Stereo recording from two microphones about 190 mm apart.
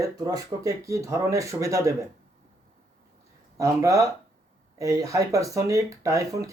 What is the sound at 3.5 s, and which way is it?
Speech, 15° right (ahead or behind).